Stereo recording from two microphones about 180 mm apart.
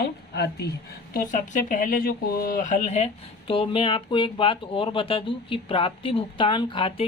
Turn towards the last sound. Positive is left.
turn(degrees=30)  # may be behind; listen again after turning